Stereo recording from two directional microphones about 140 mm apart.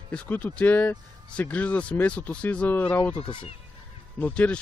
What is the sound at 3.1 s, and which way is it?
Speech, 40° left (ahead or behind).